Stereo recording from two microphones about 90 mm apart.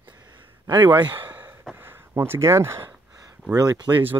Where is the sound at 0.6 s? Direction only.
60° right (ahead or behind).